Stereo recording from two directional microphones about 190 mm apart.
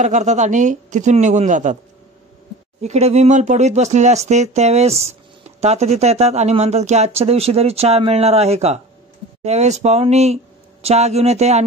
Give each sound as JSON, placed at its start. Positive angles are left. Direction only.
{"t": 0.0, "sound": "speech", "side_deg": -40}
{"t": 2.8, "sound": "speech", "side_deg": -35}